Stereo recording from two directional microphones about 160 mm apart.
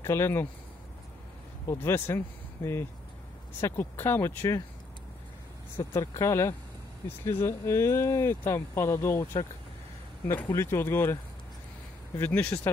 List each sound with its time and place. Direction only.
0.0 s speech: 15° left (ahead or behind)
1.7 s speech: 15° left (ahead or behind)
5.8 s speech: 15° left (ahead or behind)
12.2 s speech: 10° left (ahead or behind)